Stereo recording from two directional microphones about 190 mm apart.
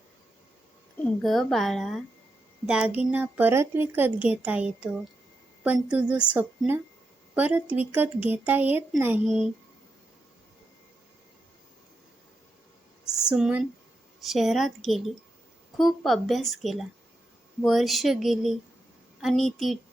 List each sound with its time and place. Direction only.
1.2 s a woman's voice: centre (ahead or behind)
13.1 s a woman's voice: 5° right (ahead or behind)